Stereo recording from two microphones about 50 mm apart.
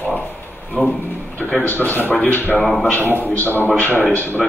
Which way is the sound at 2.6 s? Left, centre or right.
Centre.